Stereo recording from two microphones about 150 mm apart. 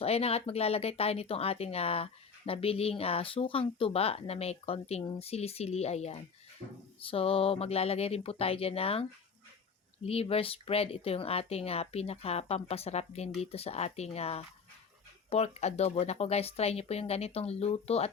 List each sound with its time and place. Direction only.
0.0 s speech: 40° left (ahead or behind)
10.1 s speech: 40° left (ahead or behind)